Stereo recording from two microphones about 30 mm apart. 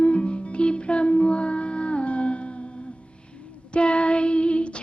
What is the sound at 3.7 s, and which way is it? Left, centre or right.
Child singing, left.